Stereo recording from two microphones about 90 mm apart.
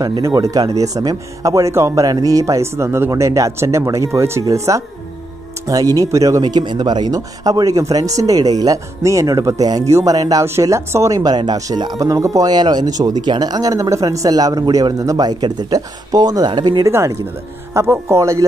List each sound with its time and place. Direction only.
0.2 s speech: 40° right (ahead or behind)
6.4 s speech: 55° right (ahead or behind)
10.4 s speech: 30° right (ahead or behind); by 12.1 s 50° right (ahead or behind)
12.1 s speech: 35° right (ahead or behind)
12.4 s speech: 50° right (ahead or behind)
16.8 s speech: 35° right (ahead or behind)